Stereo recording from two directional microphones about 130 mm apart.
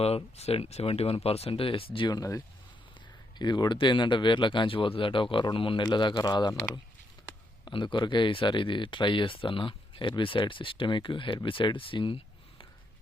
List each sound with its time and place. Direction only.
0.3 s speech: 55° left (ahead or behind); by 6.6 s 30° left (ahead or behind)
7.6 s speech: 40° left (ahead or behind)